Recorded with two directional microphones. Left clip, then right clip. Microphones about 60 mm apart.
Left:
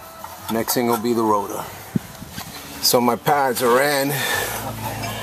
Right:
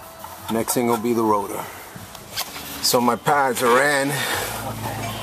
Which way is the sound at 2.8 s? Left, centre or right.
Left.